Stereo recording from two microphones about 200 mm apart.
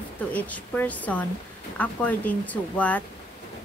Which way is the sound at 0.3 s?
10° left (ahead or behind).